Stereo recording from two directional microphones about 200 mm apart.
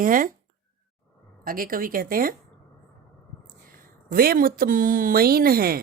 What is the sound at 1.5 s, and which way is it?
Speech, 45° right (ahead or behind).